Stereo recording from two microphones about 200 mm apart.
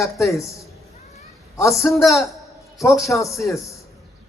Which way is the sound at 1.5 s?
15° left (ahead or behind).